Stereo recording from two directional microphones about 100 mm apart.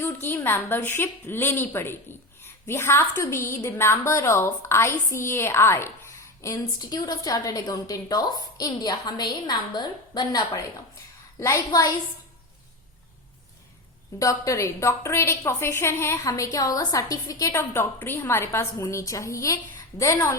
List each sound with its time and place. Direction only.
0.0 s a woman's voice: 25° left (ahead or behind); by 10.6 s 45° left (ahead or behind)
11.3 s a woman's voice: 30° left (ahead or behind)
14.2 s a woman's voice: 35° left (ahead or behind)
16.3 s a woman's voice: 40° left (ahead or behind)